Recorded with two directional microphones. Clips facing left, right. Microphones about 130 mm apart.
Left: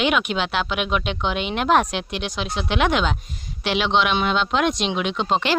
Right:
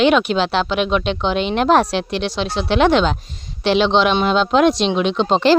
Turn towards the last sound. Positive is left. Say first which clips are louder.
# right 7 dB
turn(degrees=-30)  # may be behind; listen again after turning